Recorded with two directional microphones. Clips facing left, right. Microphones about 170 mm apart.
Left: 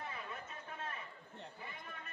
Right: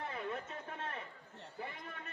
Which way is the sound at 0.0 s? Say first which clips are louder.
Right 6 dB; 60° right (ahead or behind).